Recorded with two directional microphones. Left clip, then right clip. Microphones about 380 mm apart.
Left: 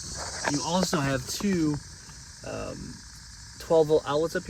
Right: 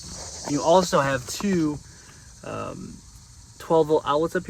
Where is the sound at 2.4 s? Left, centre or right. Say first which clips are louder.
Right 3 dB; right.